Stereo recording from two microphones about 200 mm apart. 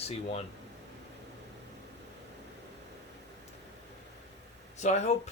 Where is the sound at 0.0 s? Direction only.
30° left (ahead or behind).